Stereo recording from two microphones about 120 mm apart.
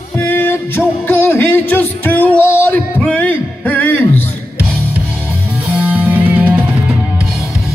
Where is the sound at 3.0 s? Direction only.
10° left (ahead or behind).